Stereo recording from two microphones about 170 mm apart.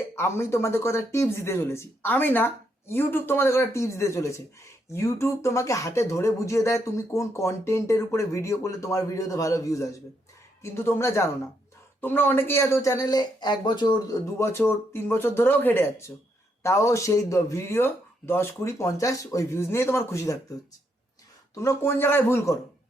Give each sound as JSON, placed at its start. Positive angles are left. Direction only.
{"t": 0.2, "sound": "speech", "side_deg": 15}
{"t": 21.5, "sound": "speech", "side_deg": 20}